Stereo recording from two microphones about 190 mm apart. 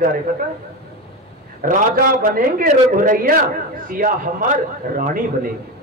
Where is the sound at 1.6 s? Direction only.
45° right (ahead or behind).